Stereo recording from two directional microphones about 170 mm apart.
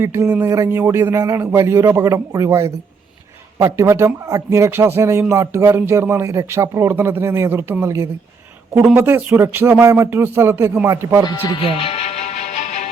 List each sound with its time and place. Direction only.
0.0 s a man's voice: 15° right (ahead or behind)
11.3 s music: 25° left (ahead or behind); by 12.9 s 45° left (ahead or behind)